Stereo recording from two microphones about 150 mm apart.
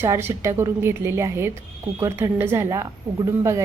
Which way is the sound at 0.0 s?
15° right (ahead or behind).